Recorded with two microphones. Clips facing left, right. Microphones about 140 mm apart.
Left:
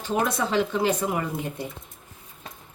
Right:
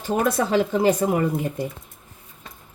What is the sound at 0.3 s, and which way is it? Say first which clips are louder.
Speech: right 4 dB; 50° right (ahead or behind).